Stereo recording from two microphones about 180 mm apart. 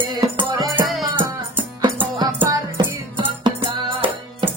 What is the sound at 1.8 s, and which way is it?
Music, 30° right (ahead or behind).